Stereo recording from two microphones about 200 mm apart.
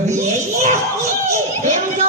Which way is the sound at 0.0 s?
35° right (ahead or behind).